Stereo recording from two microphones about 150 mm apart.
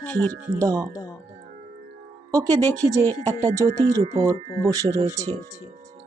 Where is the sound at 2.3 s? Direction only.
25° right (ahead or behind).